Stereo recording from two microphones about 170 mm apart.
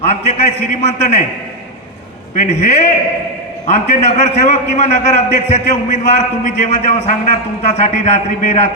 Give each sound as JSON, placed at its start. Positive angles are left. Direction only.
{"t": 0.0, "sound": "a man's voice", "side_deg": 45}
{"t": 2.3, "sound": "a man's voice", "side_deg": 45}